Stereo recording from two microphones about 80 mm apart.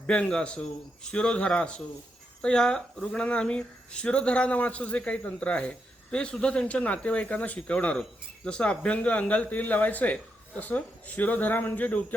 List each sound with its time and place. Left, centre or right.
0.1 s speech: centre